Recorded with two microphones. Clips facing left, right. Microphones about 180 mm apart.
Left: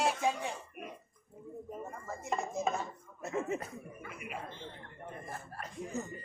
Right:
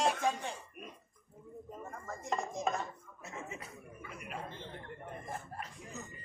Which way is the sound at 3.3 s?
50° left (ahead or behind).